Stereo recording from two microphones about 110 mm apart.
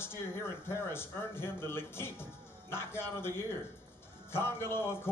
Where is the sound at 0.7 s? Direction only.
20° left (ahead or behind).